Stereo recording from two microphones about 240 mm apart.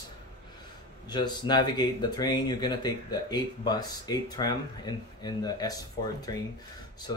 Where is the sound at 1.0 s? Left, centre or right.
Centre.